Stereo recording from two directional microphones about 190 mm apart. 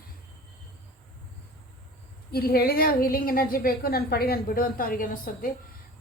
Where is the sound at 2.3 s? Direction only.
55° left (ahead or behind).